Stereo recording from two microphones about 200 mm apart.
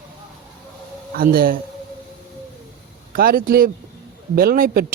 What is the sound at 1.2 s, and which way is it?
Speech, 45° right (ahead or behind).